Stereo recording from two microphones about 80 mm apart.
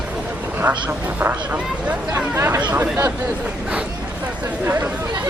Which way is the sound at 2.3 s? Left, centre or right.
Right.